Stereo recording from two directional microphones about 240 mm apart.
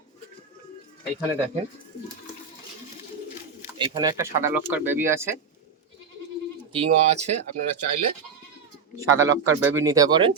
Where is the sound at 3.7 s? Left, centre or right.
Centre.